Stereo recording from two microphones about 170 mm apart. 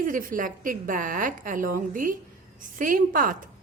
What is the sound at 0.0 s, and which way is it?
A woman's voice, 50° right (ahead or behind).